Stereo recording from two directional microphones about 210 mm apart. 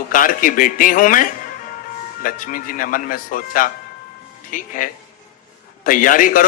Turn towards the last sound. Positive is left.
turn(degrees=40)  # may be behind; listen again after turning